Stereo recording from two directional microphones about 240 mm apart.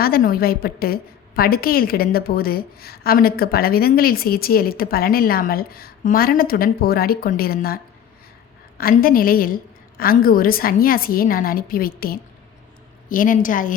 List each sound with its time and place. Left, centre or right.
0.0 s a woman's voice: left
8.8 s a woman's voice: left